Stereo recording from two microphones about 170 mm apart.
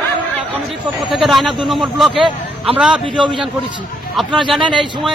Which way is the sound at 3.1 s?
25° right (ahead or behind).